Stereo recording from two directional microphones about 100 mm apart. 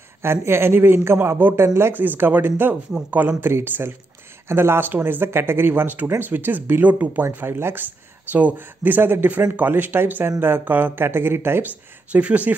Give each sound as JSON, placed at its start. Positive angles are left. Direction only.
{"t": 0.2, "sound": "speech", "side_deg": -25}